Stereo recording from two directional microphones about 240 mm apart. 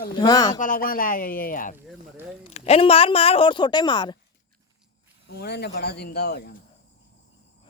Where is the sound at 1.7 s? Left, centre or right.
Centre.